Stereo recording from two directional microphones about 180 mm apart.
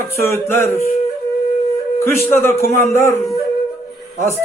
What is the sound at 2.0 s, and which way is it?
A man's voice, 15° left (ahead or behind).